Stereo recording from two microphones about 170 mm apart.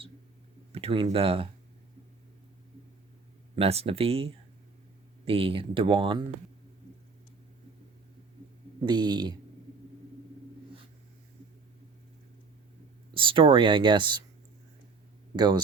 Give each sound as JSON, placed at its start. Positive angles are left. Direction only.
{"t": 0.7, "sound": "speech", "side_deg": -35}
{"t": 3.5, "sound": "speech", "side_deg": -35}
{"t": 8.8, "sound": "speech", "side_deg": -25}
{"t": 13.1, "sound": "speech", "side_deg": -30}
{"t": 15.4, "sound": "speech", "side_deg": -25}